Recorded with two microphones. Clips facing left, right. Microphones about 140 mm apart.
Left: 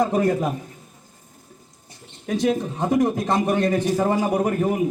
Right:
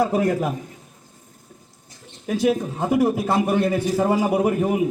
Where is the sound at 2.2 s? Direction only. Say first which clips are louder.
Right 1 dB; 5° right (ahead or behind).